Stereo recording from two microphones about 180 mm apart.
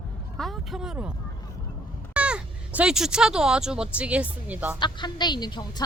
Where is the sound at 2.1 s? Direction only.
5° right (ahead or behind).